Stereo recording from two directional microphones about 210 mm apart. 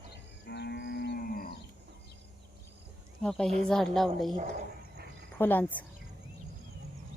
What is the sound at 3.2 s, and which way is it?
Speech, 5° left (ahead or behind).